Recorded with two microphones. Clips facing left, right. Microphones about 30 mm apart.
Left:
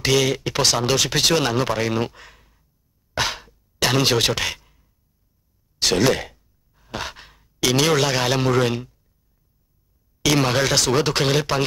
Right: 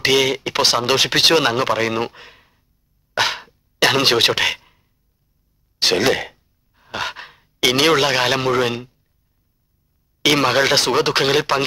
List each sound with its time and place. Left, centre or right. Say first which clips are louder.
0.0 s speech: right 3 dB; right
4.6 s a sound: right 6 dB; right
5.8 s speech: right 2 dB; right
10.2 s speech: right 4 dB; right